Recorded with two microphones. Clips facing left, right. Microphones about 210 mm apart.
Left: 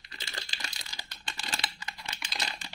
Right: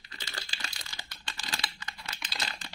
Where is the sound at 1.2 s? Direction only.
25° left (ahead or behind).